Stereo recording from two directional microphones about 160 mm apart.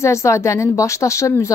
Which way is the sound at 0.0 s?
20° left (ahead or behind).